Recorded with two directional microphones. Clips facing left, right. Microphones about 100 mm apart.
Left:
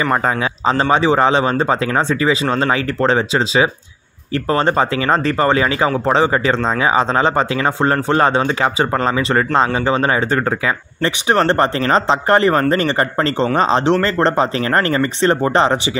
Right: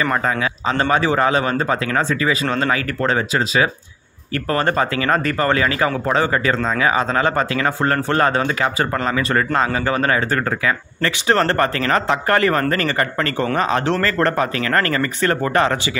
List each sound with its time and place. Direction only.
0.7 s speech: 30° left (ahead or behind)